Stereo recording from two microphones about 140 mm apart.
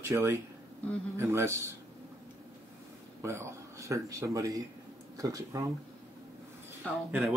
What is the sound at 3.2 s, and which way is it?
Speech, 20° right (ahead or behind).